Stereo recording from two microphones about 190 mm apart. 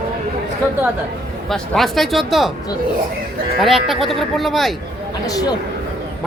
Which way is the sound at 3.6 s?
Centre (ahead or behind).